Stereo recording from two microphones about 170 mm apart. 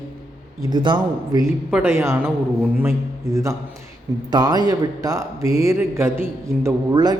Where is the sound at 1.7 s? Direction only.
10° right (ahead or behind).